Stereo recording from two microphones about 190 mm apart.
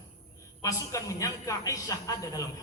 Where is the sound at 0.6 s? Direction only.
15° left (ahead or behind).